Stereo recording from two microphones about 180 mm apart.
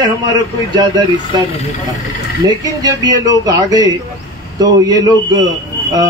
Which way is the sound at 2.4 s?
20° right (ahead or behind).